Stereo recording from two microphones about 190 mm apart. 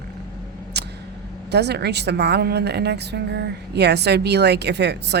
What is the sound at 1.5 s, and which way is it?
A woman's voice, 60° right (ahead or behind).